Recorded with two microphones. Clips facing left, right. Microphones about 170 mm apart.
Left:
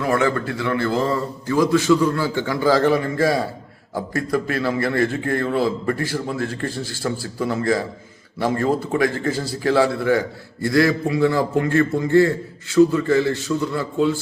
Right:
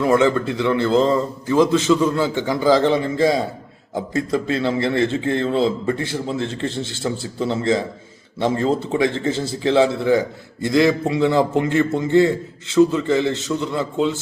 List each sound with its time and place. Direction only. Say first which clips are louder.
0.0 s a man's voice: right 4 dB; 20° right (ahead or behind)